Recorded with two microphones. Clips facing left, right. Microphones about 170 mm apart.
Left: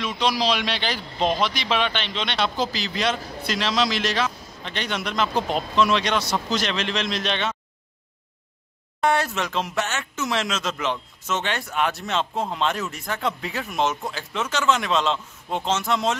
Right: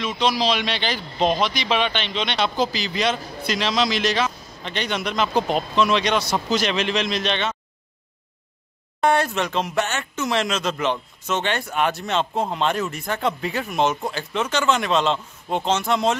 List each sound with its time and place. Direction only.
0.0 s a man's voice: 5° left (ahead or behind)
9.0 s a man's voice: centre (ahead or behind)